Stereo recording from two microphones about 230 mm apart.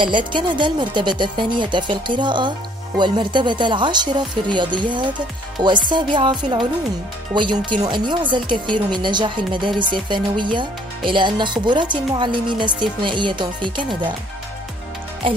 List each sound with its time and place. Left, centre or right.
0.0 s speech: right